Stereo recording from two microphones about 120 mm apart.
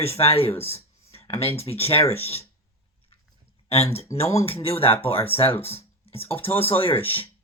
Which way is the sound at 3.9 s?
55° left (ahead or behind).